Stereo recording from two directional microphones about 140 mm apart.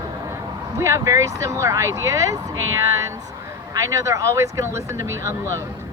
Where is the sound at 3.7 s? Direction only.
20° right (ahead or behind).